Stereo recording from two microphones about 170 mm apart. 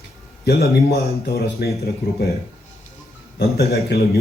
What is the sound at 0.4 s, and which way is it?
A man's voice, 70° left (ahead or behind).